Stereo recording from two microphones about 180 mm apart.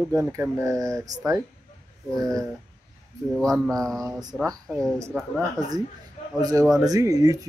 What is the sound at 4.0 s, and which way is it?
Speech, 20° right (ahead or behind).